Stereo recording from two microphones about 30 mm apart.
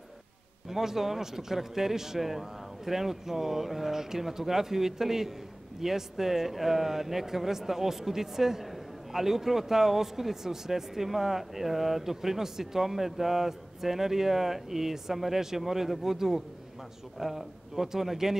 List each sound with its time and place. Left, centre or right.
0.7 s speech: centre